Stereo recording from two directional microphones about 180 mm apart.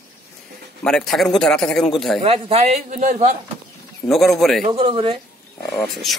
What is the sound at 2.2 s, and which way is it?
A man's voice, 30° right (ahead or behind).